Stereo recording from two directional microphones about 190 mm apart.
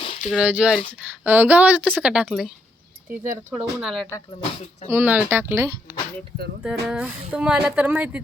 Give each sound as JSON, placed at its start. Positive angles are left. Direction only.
{"t": 0.0, "sound": "a sound", "side_deg": 30}
{"t": 0.3, "sound": "speech", "side_deg": -5}
{"t": 3.5, "sound": "speech", "side_deg": -5}
{"t": 6.6, "sound": "speech", "side_deg": 0}